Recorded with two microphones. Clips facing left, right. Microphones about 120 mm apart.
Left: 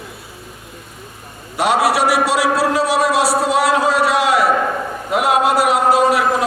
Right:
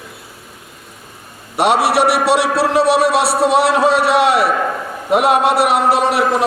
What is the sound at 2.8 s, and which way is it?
A man's voice, 65° right (ahead or behind).